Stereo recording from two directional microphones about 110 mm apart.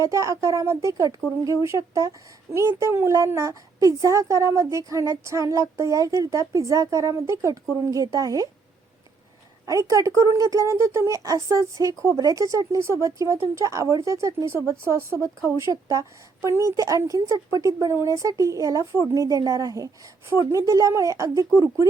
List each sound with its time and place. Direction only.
0.0 s speech: 30° right (ahead or behind)
9.6 s speech: 30° right (ahead or behind)